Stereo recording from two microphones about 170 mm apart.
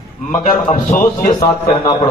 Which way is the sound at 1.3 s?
25° left (ahead or behind).